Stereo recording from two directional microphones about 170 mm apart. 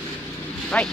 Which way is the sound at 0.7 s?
5° left (ahead or behind).